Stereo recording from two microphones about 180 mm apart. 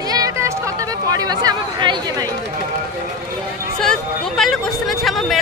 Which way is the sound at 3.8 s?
5° left (ahead or behind).